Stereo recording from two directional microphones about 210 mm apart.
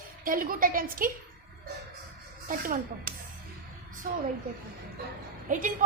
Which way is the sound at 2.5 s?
40° right (ahead or behind).